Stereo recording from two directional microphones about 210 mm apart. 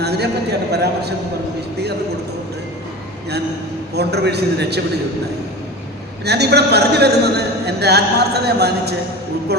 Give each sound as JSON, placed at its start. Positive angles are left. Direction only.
{"t": 0.0, "sound": "a man's voice", "side_deg": -50}
{"t": 3.9, "sound": "a man's voice", "side_deg": -50}
{"t": 6.2, "sound": "a man's voice", "side_deg": -50}